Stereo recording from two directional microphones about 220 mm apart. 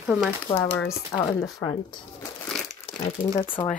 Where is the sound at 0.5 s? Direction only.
10° left (ahead or behind).